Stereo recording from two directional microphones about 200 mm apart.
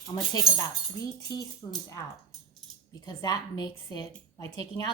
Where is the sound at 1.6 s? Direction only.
20° left (ahead or behind).